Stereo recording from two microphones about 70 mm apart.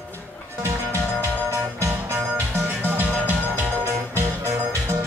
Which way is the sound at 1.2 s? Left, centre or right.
Right.